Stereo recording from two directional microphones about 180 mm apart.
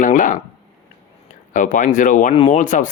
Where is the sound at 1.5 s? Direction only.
45° left (ahead or behind).